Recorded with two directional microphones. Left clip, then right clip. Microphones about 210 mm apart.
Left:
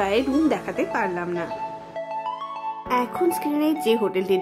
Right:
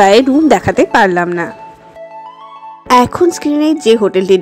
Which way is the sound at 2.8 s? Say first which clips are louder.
Right 14 dB; 40° right (ahead or behind).